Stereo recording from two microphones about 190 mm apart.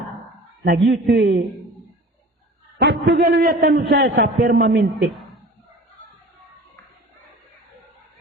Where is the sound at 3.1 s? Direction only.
60° right (ahead or behind).